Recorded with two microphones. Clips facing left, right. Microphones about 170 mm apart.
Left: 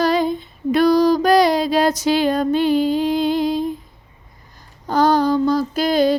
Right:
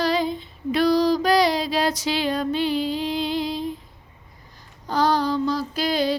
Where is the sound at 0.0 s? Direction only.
50° left (ahead or behind).